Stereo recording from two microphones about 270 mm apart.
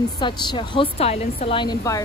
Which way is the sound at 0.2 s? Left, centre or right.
Centre.